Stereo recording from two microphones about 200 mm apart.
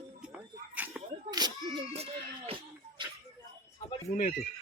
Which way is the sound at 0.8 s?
5° right (ahead or behind).